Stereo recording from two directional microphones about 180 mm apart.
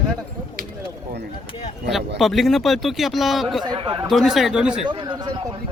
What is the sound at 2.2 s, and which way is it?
Speech, centre (ahead or behind).